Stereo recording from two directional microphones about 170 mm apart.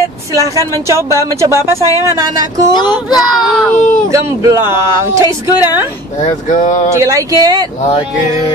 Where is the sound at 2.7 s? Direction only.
25° left (ahead or behind).